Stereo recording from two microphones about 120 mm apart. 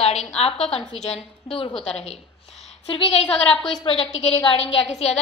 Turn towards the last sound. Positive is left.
turn(degrees=60)  # may be behind; listen again after turning